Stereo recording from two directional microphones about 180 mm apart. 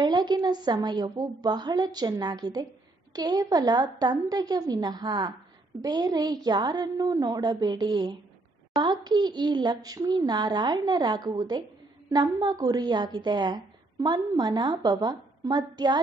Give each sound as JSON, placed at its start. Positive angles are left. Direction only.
{"t": 0.0, "sound": "a woman's voice", "side_deg": -25}